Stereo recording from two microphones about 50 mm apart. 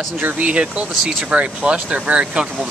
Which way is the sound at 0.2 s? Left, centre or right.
Right.